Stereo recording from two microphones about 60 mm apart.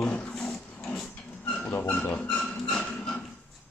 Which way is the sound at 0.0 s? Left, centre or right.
Centre.